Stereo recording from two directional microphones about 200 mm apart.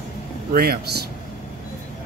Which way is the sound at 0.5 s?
50° right (ahead or behind).